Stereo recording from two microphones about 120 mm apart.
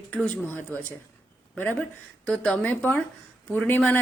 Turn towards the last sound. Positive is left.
turn(degrees=15)  # may be behind; listen again after turning